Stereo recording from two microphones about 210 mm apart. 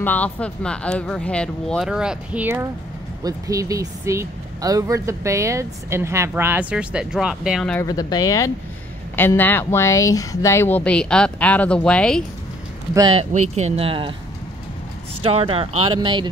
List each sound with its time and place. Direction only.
0.0 s speech: 5° left (ahead or behind)
7.8 s speech: 20° left (ahead or behind)
12.9 s speech: 25° right (ahead or behind)
15.2 s speech: 25° right (ahead or behind)